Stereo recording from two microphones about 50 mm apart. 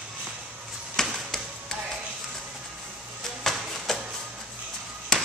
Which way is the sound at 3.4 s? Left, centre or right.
Centre.